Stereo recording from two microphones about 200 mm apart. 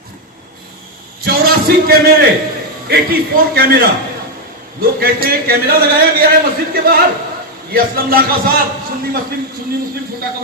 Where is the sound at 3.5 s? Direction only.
50° right (ahead or behind).